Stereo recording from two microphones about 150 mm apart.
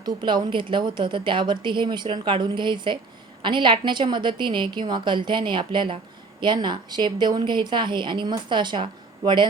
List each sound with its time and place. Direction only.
0.0 s a woman's voice: 30° right (ahead or behind)